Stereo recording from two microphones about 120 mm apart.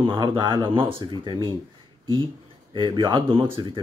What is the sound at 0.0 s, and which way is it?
A man's voice, 45° right (ahead or behind).